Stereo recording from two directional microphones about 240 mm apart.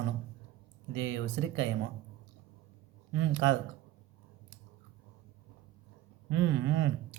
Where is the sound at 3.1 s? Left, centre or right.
Right.